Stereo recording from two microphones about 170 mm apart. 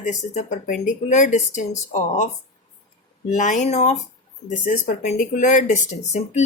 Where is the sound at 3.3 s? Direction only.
45° left (ahead or behind).